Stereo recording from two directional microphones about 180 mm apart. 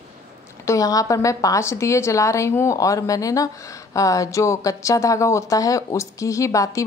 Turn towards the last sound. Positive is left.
turn(degrees=20)  # may be behind; listen again after turning